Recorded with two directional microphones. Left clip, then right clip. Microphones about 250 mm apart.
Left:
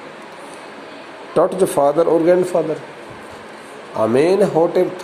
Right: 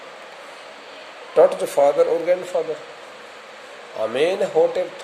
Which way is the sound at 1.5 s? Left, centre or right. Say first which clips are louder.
Left 2 dB; centre.